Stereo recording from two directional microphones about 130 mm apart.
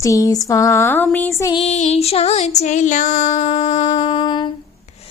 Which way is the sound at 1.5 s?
55° left (ahead or behind).